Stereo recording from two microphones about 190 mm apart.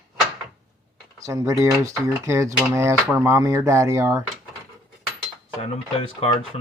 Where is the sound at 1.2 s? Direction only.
15° right (ahead or behind).